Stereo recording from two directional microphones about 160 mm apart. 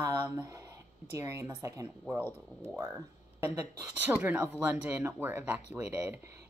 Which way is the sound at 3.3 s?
15° right (ahead or behind).